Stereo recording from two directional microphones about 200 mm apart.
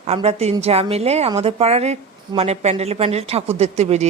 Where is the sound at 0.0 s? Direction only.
30° right (ahead or behind).